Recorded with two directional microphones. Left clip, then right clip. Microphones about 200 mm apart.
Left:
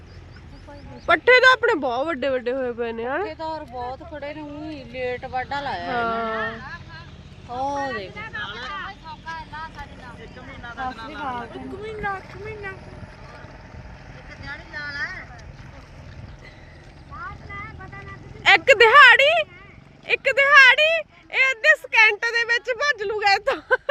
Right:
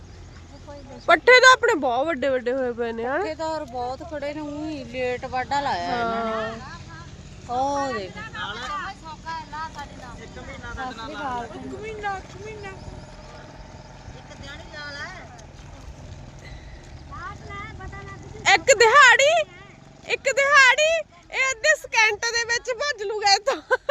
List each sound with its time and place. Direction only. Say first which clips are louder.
1.0 s speech: right 1 dB; 5° right (ahead or behind)
3.2 s speech: right 2 dB; 50° right (ahead or behind)
6.0 s speech: left 1 dB; 5° left (ahead or behind)
6.6 s vehicle: left 2 dB; 25° left (ahead or behind)
7.4 s speech: right 2 dB; 55° right (ahead or behind)
8.1 s speech: left 1 dB; 45° right (ahead or behind)
8.9 s vehicle: right 1 dB; 60° right (ahead or behind)
10.5 s vehicle: even; 40° right (ahead or behind)
10.9 s speech: right 1 dB; 35° right (ahead or behind)
11.9 s speech: left 1 dB; 5° right (ahead or behind)
14.4 s vehicle: left 5 dB; 45° right (ahead or behind)
17.2 s vehicle: left 1 dB; 40° left (ahead or behind)
18.4 s speech: left 2 dB; 10° left (ahead or behind)